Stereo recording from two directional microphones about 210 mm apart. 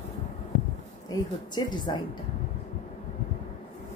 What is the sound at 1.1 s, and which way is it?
Speech, 20° left (ahead or behind).